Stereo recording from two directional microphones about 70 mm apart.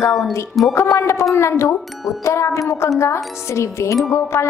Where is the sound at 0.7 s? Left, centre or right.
Left.